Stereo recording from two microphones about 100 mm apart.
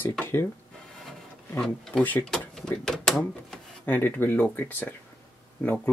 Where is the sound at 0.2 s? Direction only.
20° left (ahead or behind).